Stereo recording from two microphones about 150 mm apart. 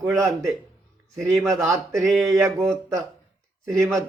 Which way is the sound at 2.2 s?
20° right (ahead or behind).